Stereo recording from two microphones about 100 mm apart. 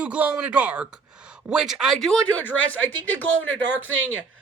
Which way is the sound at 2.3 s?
15° left (ahead or behind).